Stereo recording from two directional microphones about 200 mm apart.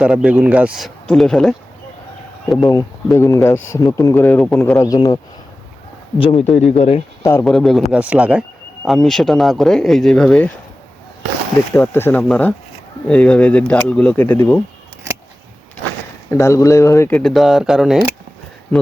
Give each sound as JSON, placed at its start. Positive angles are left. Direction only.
{"t": 0.0, "sound": "speech", "side_deg": -5}
{"t": 2.6, "sound": "speech", "side_deg": 15}
{"t": 6.5, "sound": "speech", "side_deg": 5}
{"t": 6.7, "sound": "speech", "side_deg": 30}
{"t": 7.2, "sound": "speech", "side_deg": 15}
{"t": 7.4, "sound": "speech", "side_deg": 0}
{"t": 11.7, "sound": "speech", "side_deg": 10}
{"t": 16.3, "sound": "speech", "side_deg": 15}